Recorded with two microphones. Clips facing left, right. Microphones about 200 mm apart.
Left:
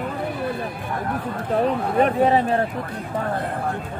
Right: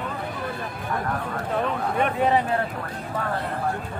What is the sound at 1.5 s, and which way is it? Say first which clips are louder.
Speech: left 6 dB; 35° left (ahead or behind).